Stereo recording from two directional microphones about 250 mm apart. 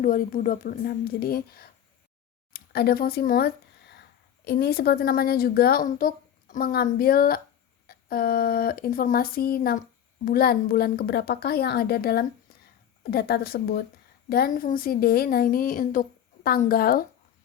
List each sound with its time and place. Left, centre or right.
0.0 s a woman's voice: left
2.5 s a sound: left
4.4 s a woman's voice: left